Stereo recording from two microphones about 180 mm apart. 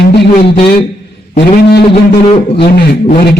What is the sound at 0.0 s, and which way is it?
Speech, 65° left (ahead or behind).